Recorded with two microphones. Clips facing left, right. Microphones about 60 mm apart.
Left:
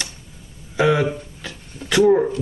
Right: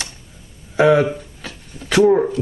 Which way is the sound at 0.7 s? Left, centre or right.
Right.